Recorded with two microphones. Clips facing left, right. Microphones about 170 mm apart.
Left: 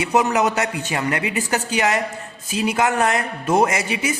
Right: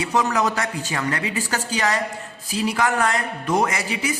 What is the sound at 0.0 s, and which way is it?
A man's voice, 20° left (ahead or behind).